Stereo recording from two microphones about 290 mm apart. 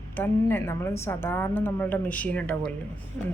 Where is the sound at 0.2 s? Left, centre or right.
Centre.